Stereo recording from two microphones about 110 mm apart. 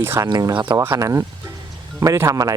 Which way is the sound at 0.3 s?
40° right (ahead or behind).